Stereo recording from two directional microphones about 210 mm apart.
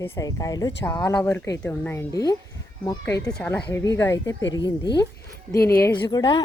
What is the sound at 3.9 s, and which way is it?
Speech, 15° left (ahead or behind).